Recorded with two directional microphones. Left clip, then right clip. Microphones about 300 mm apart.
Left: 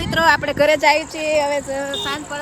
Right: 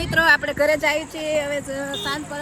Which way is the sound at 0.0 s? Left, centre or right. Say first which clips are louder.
Left 1 dB; centre.